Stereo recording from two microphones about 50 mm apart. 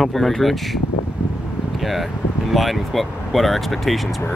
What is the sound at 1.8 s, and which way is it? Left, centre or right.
Speech, centre.